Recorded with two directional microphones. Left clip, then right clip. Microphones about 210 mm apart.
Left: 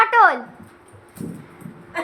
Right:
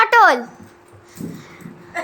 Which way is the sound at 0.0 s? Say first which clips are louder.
Right 2 dB; 45° right (ahead or behind).